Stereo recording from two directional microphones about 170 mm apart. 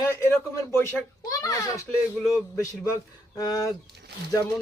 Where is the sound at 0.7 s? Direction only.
15° left (ahead or behind).